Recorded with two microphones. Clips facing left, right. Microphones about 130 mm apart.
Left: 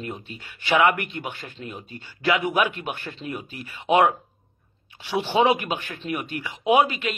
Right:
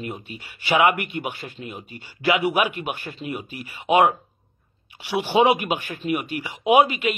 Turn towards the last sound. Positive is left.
turn(degrees=-15)  # may be behind; listen again after turning